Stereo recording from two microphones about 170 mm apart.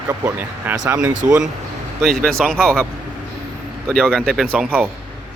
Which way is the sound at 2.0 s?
Centre (ahead or behind).